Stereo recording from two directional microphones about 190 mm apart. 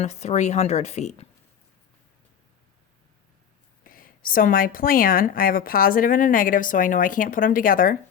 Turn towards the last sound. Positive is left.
turn(degrees=45)  # may be behind; listen again after turning